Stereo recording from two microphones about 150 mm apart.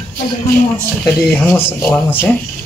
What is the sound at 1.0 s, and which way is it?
Speech, 10° left (ahead or behind).